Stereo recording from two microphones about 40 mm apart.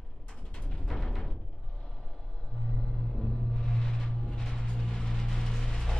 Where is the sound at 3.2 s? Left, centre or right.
Centre.